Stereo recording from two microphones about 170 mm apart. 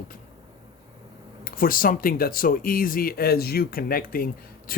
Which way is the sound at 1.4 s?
55° left (ahead or behind).